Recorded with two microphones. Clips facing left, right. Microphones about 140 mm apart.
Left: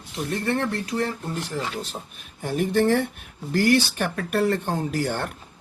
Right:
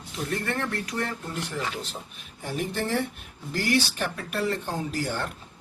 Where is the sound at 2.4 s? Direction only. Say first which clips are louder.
Left 8 dB; 55° left (ahead or behind).